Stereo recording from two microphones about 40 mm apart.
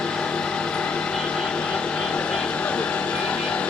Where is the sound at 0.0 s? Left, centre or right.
Left.